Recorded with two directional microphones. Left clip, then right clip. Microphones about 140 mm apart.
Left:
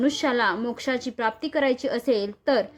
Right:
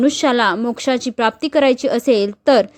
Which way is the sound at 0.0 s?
40° right (ahead or behind).